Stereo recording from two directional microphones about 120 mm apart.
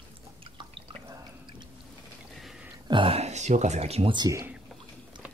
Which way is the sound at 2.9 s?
50° right (ahead or behind).